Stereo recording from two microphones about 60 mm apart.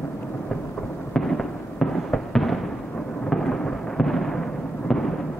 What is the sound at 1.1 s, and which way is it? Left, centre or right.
Fireworks, centre.